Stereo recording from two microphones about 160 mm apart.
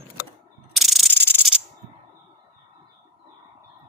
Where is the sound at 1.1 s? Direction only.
15° left (ahead or behind).